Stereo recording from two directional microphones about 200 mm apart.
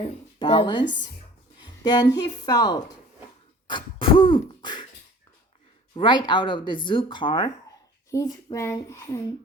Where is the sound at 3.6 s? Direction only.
25° left (ahead or behind).